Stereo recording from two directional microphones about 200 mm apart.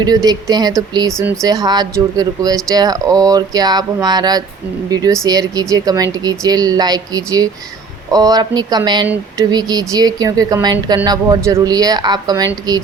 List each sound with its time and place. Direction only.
0.0 s a woman's voice: 20° right (ahead or behind)